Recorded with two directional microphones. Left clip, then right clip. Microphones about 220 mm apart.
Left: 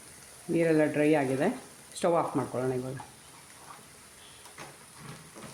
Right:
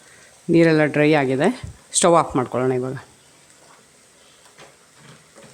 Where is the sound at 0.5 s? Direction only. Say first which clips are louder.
Right 10 dB; 45° right (ahead or behind).